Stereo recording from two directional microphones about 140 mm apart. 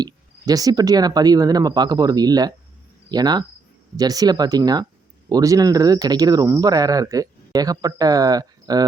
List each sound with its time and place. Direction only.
0.0 s speech: 25° right (ahead or behind)